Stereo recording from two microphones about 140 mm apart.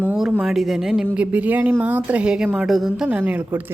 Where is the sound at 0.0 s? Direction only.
5° right (ahead or behind).